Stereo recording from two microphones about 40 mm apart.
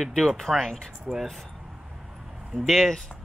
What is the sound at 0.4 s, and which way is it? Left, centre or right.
Speech, centre.